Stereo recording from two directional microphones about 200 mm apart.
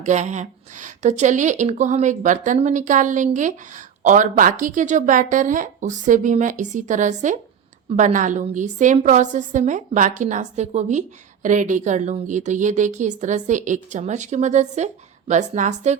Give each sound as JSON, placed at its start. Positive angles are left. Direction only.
{"t": 0.0, "sound": "a woman's voice", "side_deg": -35}